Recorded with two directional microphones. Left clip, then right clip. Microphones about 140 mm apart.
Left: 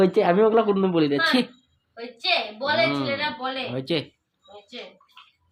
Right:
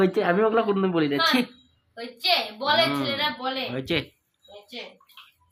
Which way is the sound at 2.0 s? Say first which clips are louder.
Even; centre (ahead or behind).